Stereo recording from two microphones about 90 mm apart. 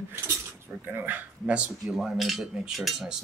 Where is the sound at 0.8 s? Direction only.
20° right (ahead or behind).